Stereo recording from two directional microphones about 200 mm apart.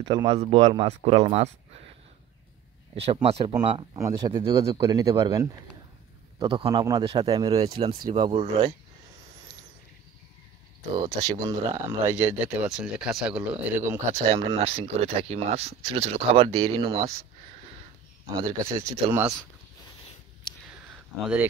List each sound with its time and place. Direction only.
0.0 s speech: 20° right (ahead or behind)
0.4 s speech: 30° right (ahead or behind)
3.1 s speech: 30° right (ahead or behind)
11.0 s speech: 20° right (ahead or behind)
14.3 s speech: 30° right (ahead or behind)
18.4 s speech: 15° right (ahead or behind)